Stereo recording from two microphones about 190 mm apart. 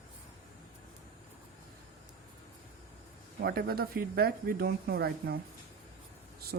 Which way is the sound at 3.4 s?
55° right (ahead or behind).